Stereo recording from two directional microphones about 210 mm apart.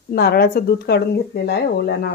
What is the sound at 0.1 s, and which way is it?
Speech, 50° left (ahead or behind).